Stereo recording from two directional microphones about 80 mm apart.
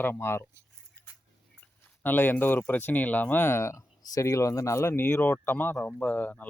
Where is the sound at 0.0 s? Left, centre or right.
Left.